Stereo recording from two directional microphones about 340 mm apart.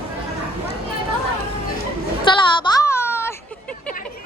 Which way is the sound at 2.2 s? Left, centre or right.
Centre.